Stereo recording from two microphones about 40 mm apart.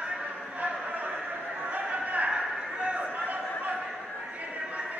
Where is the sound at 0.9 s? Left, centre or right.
Right.